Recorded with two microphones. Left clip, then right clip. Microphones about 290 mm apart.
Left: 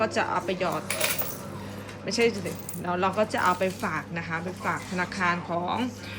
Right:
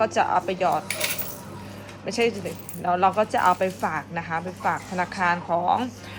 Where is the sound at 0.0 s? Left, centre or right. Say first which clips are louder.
Right 5 dB; centre.